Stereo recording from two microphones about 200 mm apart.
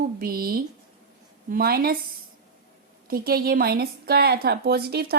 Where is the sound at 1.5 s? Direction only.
50° right (ahead or behind).